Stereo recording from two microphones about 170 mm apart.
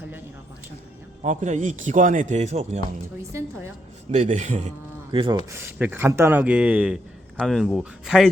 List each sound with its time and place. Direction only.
1.2 s a man's voice: 45° right (ahead or behind)
4.1 s a man's voice: 45° right (ahead or behind)
5.1 s speech: 30° right (ahead or behind)
5.5 s speech: 15° right (ahead or behind)